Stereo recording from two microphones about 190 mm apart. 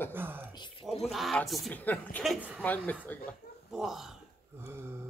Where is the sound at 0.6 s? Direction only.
25° left (ahead or behind).